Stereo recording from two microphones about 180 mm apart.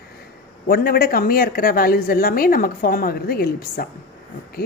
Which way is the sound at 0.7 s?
60° left (ahead or behind).